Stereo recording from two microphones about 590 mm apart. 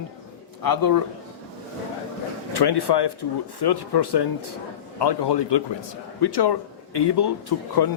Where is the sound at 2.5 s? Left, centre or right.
Left.